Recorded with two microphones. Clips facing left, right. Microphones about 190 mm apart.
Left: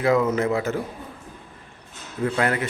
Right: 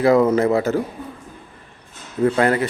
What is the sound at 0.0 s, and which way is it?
Speech, 35° right (ahead or behind).